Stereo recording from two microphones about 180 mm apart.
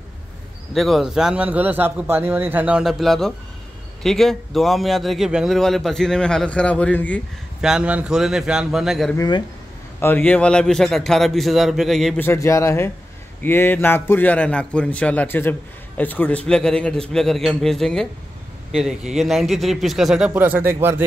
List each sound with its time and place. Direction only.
0.7 s a man's voice: centre (ahead or behind)
7.6 s a man's voice: 5° right (ahead or behind)
9.1 s a man's voice: 20° left (ahead or behind); by 12.3 s centre (ahead or behind)
12.3 s a man's voice: 15° left (ahead or behind); by 20.6 s 10° right (ahead or behind)